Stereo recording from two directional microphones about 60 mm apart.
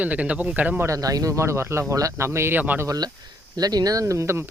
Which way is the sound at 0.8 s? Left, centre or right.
Right.